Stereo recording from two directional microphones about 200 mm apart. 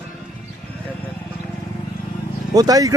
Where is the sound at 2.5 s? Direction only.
20° right (ahead or behind).